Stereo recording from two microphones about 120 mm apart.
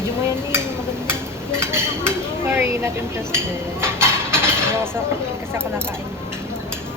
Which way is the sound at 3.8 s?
20° right (ahead or behind).